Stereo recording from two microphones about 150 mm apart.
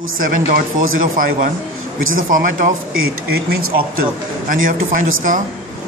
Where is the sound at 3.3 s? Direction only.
85° right.